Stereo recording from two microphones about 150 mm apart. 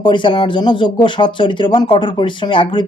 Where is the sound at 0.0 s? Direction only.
35° left (ahead or behind).